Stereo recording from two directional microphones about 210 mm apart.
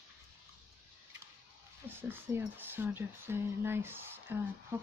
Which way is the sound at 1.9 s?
10° right (ahead or behind).